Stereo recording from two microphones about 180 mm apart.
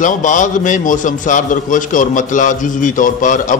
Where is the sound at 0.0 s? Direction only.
45° left (ahead or behind).